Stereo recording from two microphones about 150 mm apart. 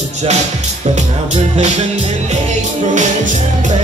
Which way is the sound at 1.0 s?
50° right (ahead or behind).